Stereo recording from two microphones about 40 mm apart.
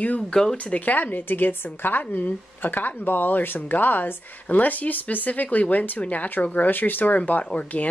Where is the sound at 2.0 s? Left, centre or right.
Left.